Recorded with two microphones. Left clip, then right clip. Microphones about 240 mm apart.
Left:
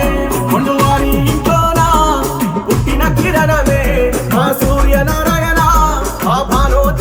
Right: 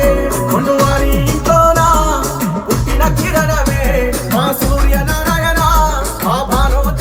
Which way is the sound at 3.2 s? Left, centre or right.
Left.